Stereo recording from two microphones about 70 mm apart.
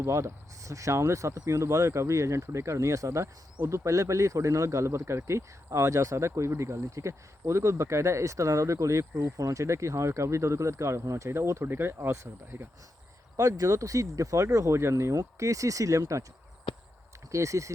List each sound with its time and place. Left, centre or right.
0.0 s speech: right
13.3 s speech: right
17.3 s speech: right